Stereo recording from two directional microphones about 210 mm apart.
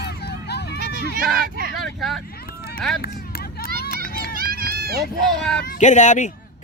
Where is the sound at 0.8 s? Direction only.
40° right (ahead or behind).